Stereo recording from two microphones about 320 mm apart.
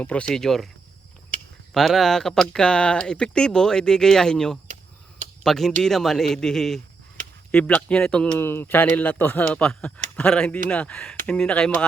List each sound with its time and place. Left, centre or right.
0.0 s speech: centre
1.7 s speech: centre